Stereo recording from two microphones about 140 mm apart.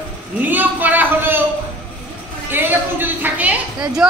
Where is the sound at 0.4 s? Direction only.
10° right (ahead or behind).